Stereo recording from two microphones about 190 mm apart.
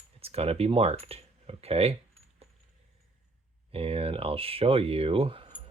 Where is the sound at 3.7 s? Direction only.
30° right (ahead or behind).